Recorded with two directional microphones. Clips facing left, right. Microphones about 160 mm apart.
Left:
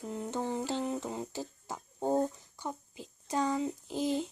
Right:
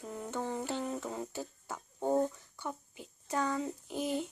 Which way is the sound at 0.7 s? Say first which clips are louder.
Left 3 dB; 30° left (ahead or behind).